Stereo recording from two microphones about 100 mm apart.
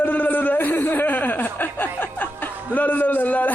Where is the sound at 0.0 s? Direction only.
20° left (ahead or behind).